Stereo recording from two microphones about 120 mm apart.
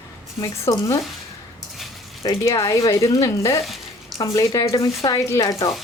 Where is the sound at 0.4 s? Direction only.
30° left (ahead or behind).